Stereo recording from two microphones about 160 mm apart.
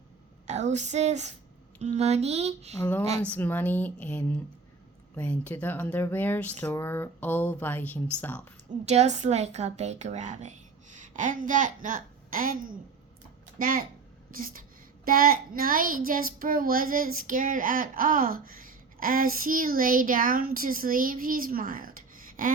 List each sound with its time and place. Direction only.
0.4 s a woman's voice: 45° right (ahead or behind)
2.7 s speech: 10° left (ahead or behind)
8.9 s a woman's voice: 45° right (ahead or behind); by 22.5 s 60° right (ahead or behind)